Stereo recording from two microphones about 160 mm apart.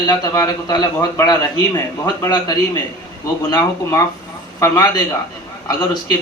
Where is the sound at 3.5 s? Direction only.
20° left (ahead or behind).